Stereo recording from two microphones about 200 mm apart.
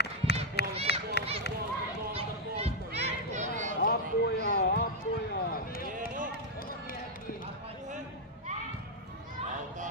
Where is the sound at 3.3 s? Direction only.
40° right (ahead or behind).